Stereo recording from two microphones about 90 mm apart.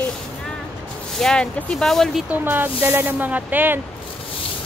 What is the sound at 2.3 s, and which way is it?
Speech, 20° right (ahead or behind).